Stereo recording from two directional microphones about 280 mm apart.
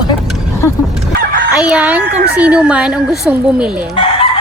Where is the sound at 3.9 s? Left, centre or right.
Centre.